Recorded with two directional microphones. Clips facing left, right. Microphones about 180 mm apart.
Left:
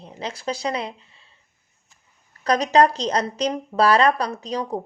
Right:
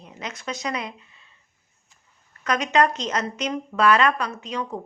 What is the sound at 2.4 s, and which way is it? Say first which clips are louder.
Speech: left 4 dB; 35° left (ahead or behind).